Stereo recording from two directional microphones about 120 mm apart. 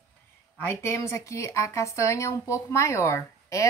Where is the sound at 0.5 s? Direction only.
20° left (ahead or behind).